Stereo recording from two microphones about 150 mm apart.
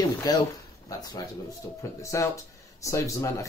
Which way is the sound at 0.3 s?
25° left (ahead or behind).